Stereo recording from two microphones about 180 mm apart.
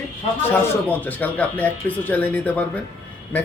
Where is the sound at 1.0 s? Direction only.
10° left (ahead or behind).